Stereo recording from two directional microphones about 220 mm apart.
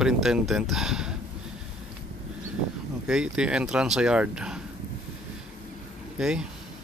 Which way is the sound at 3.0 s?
5° right (ahead or behind).